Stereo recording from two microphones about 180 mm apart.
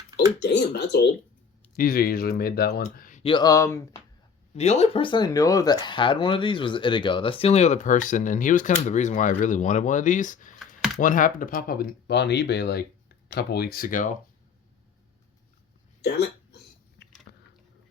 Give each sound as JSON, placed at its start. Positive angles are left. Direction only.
{"t": 0.4, "sound": "speech", "side_deg": 70}
{"t": 1.7, "sound": "speech", "side_deg": 55}
{"t": 2.9, "sound": "a sound", "side_deg": 50}
{"t": 3.2, "sound": "speech", "side_deg": 25}
{"t": 4.5, "sound": "speech", "side_deg": 35}
{"t": 17.3, "sound": "biting", "side_deg": 75}